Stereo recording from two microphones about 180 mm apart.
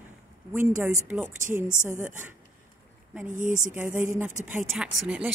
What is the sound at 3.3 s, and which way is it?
Speech, 45° right (ahead or behind).